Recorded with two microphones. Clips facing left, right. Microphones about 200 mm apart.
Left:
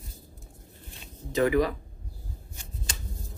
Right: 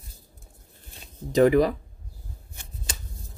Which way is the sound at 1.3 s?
35° right (ahead or behind).